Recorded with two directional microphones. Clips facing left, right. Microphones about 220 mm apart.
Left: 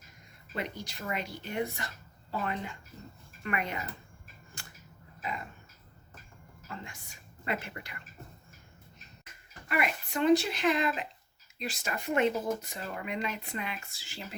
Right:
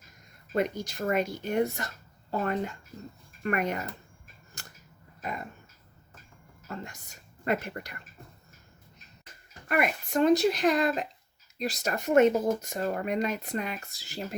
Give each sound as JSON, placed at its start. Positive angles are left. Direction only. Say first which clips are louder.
{"t": 0.5, "sound": "speech", "louder": "right 9 dB", "side_deg": -45}
{"t": 4.6, "sound": "a sound", "louder": "right 2 dB", "side_deg": -40}
{"t": 6.7, "sound": "a woman's voice", "louder": "right 5 dB", "side_deg": -40}
{"t": 9.6, "sound": "speech", "louder": "right 4 dB", "side_deg": -50}